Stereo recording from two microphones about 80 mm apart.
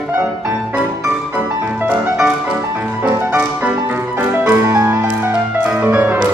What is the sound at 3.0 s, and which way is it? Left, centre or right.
Music, right.